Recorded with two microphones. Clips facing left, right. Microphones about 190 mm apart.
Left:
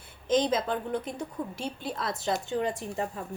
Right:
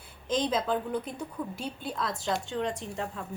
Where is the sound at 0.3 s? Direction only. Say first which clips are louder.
Left 2 dB; centre (ahead or behind).